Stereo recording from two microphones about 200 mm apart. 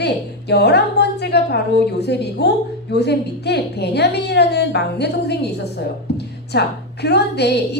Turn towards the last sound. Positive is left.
turn(degrees=55)  # may be behind; listen again after turning